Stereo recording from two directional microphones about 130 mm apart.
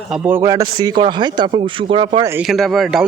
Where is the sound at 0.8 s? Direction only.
35° right (ahead or behind).